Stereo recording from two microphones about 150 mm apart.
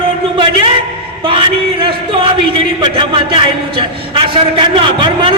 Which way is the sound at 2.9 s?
35° right (ahead or behind).